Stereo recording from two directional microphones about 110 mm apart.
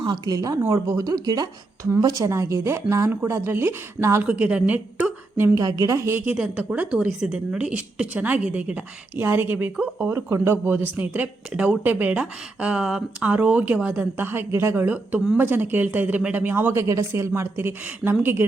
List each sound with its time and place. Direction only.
0.0 s speech: 40° right (ahead or behind); by 4.3 s 25° right (ahead or behind)
4.3 s a woman's voice: 10° right (ahead or behind)
5.4 s a woman's voice: 30° right (ahead or behind)